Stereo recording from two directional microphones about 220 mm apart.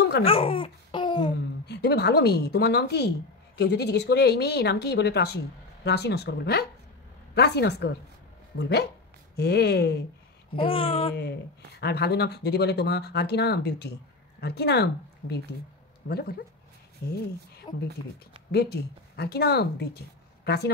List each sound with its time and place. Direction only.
0.2 s babbling: 25° left (ahead or behind)
1.7 s a woman's voice: 45° left (ahead or behind)
10.5 s babbling: 25° left (ahead or behind)
11.8 s a woman's voice: 45° left (ahead or behind)
17.7 s babbling: 20° left (ahead or behind)
18.5 s a woman's voice: 45° left (ahead or behind)